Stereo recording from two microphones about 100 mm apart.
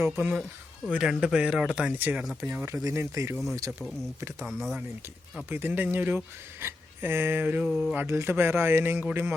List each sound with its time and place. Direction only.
0.0 s a man's voice: 15° right (ahead or behind)
3.7 s speech: centre (ahead or behind)
5.5 s speech: 20° right (ahead or behind)